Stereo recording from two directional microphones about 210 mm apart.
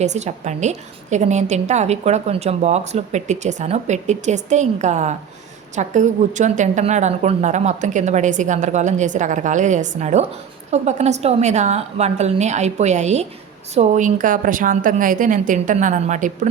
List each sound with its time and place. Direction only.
0.0 s a woman's voice: 35° right (ahead or behind)